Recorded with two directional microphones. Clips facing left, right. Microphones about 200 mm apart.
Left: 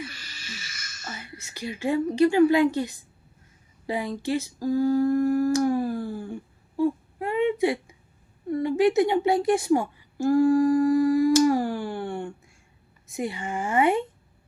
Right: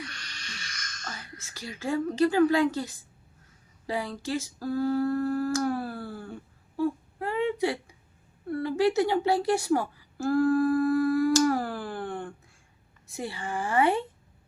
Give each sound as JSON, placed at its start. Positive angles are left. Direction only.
{"t": 0.0, "sound": "whispering", "side_deg": 5}
{"t": 3.8, "sound": "humming", "side_deg": 15}
{"t": 8.4, "sound": "a sound", "side_deg": 15}
{"t": 9.0, "sound": "a woman's voice", "side_deg": 15}
{"t": 9.6, "sound": "humming", "side_deg": 15}
{"t": 13.1, "sound": "a woman's voice", "side_deg": 15}